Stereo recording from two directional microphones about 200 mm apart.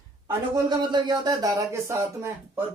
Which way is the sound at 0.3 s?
20° right (ahead or behind).